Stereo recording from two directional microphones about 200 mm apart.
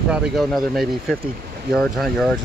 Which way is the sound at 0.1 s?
Centre (ahead or behind).